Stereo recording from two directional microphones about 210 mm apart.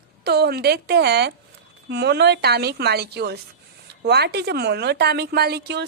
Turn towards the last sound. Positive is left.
turn(degrees=-55)  # may be behind; listen again after turning